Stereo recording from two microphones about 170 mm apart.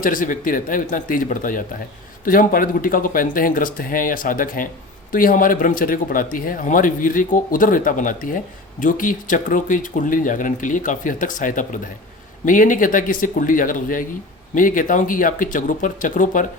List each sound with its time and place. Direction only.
0.0 s speech: 50° left (ahead or behind)